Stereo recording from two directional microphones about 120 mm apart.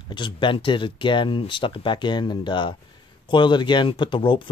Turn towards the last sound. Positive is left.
turn(degrees=45)  # may be behind; listen again after turning